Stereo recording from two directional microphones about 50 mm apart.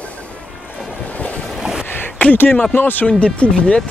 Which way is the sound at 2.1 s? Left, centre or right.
Left.